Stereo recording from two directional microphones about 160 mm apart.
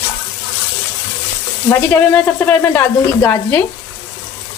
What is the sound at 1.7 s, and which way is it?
Speech, 15° left (ahead or behind).